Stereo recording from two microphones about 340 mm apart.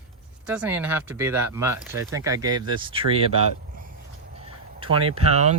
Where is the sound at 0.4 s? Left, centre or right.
Centre.